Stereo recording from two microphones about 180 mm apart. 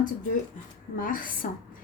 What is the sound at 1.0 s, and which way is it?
Speech, 50° left (ahead or behind).